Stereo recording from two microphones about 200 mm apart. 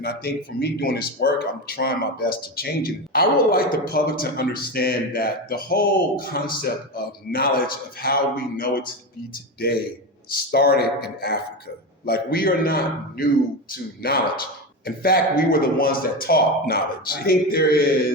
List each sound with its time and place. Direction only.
0.0 s speech: 50° left (ahead or behind)